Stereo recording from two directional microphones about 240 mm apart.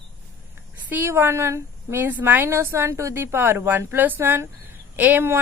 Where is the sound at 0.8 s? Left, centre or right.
Centre.